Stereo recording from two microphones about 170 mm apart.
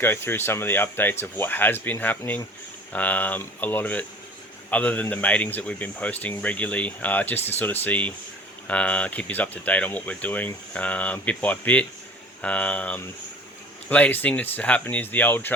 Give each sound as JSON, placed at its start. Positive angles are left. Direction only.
{"t": 0.0, "sound": "speech", "side_deg": 15}